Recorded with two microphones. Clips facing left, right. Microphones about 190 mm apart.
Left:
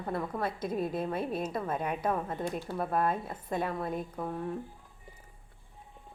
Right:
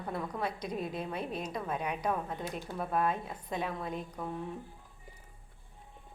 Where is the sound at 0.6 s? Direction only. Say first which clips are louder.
Left 4 dB; 50° left (ahead or behind).